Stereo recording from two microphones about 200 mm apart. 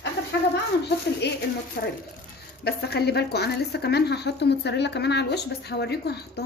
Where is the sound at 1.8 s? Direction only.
60° left (ahead or behind).